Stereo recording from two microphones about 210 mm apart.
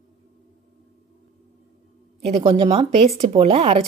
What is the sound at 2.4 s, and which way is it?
Speech, 25° right (ahead or behind).